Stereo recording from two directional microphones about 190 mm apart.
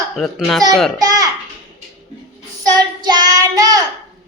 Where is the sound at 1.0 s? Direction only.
20° right (ahead or behind).